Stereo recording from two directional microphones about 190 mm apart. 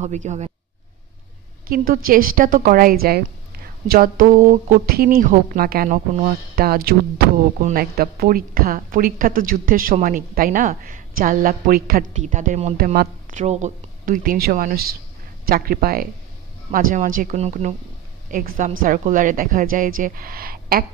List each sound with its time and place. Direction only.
0.0 s speech: 35° right (ahead or behind)
1.7 s a woman's voice: 50° right (ahead or behind)
12.7 s a woman's voice: 50° right (ahead or behind)